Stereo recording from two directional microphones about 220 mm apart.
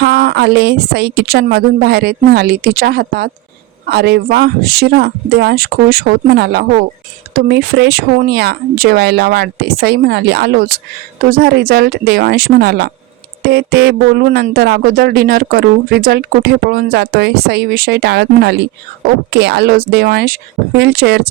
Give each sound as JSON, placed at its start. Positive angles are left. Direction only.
{"t": 0.0, "sound": "speech", "side_deg": -45}